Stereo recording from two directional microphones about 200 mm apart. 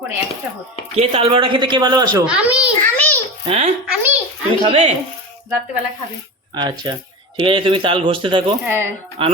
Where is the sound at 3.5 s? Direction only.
30° right (ahead or behind).